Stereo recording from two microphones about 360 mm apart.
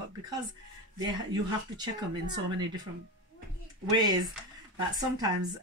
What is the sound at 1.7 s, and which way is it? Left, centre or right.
Speech, centre.